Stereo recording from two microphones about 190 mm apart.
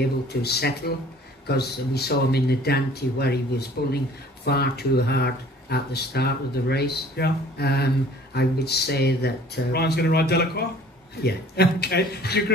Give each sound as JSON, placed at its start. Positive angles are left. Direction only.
{"t": 0.0, "sound": "speech", "side_deg": 60}